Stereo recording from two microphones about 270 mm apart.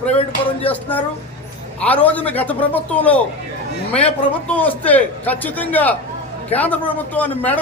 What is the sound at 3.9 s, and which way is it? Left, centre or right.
Speech, left.